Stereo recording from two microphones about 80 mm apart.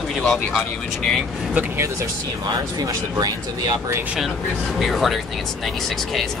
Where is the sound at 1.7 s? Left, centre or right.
Right.